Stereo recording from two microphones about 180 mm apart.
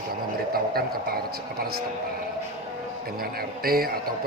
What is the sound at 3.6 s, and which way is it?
Speech, 55° right (ahead or behind).